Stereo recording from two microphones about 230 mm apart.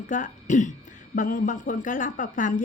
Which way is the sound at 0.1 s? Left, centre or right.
Left.